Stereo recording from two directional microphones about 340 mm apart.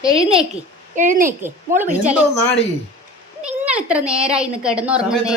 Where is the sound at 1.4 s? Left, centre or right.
Centre.